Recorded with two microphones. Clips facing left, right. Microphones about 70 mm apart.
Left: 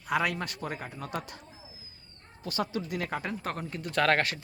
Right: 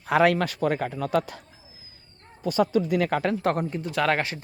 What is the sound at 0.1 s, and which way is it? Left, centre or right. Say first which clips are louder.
Speech: right 9 dB; right.